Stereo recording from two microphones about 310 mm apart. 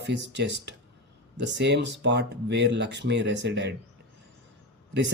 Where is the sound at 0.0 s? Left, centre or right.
Right.